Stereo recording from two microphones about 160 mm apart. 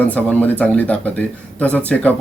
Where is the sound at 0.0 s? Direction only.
10° left (ahead or behind).